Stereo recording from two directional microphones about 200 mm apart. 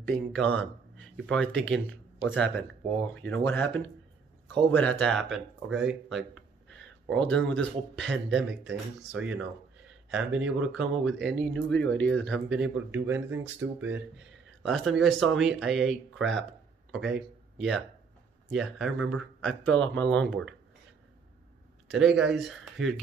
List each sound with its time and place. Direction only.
0.0 s speech: 5° left (ahead or behind)
21.8 s speech: centre (ahead or behind)